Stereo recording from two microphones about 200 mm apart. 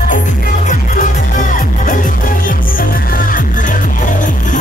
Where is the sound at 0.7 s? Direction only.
40° left (ahead or behind).